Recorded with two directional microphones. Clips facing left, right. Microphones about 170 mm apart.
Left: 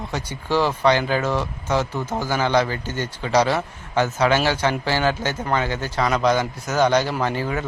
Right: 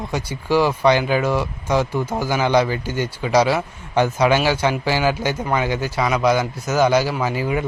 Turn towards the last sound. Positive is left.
turn(degrees=-15)  # may be behind; listen again after turning